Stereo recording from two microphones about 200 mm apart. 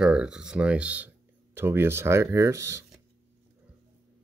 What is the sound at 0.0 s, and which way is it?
Speech, 5° right (ahead or behind).